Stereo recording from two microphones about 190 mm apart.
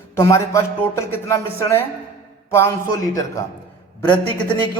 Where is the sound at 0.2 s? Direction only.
15° left (ahead or behind).